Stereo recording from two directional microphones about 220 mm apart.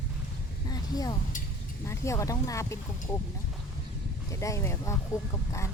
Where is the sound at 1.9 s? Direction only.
15° left (ahead or behind).